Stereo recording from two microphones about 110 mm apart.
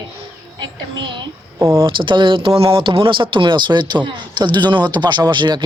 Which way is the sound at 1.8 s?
45° right (ahead or behind).